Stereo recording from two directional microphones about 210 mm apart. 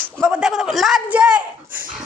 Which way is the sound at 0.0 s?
5° right (ahead or behind).